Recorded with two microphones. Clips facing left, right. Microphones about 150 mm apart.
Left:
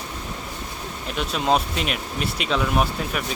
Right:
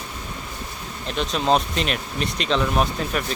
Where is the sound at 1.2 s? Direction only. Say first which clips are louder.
Right 1 dB; 5° left (ahead or behind).